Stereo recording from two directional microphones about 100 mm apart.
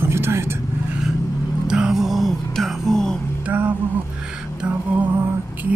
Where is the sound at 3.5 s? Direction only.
20° right (ahead or behind).